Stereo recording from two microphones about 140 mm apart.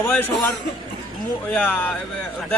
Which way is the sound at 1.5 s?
10° left (ahead or behind).